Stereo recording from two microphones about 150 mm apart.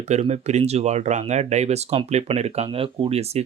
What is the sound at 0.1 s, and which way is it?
Speech, 45° right (ahead or behind).